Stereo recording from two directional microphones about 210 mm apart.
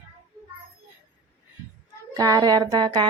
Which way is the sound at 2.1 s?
15° right (ahead or behind).